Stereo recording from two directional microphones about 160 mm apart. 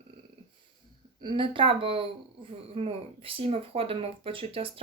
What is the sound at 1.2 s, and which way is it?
Speech, 30° right (ahead or behind).